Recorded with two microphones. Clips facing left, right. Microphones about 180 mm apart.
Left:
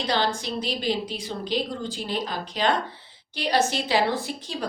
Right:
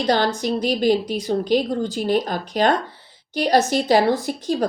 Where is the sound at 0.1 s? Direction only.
45° right (ahead or behind).